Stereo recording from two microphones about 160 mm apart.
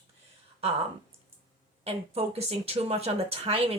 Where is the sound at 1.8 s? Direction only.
40° right (ahead or behind).